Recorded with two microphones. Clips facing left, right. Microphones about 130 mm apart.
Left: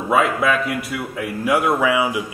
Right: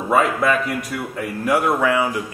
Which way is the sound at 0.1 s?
Centre (ahead or behind).